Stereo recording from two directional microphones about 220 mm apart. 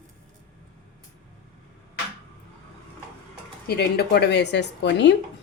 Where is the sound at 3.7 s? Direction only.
45° left (ahead or behind).